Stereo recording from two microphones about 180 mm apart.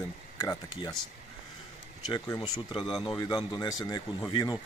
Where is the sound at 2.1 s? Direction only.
25° left (ahead or behind).